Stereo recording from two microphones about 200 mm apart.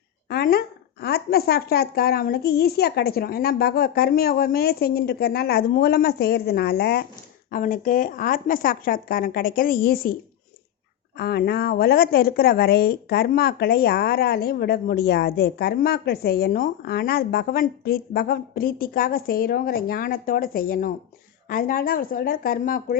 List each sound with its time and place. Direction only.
0.3 s a sound: 50° left (ahead or behind)
1.0 s speech: 50° left (ahead or behind)
11.2 s speech: 50° left (ahead or behind)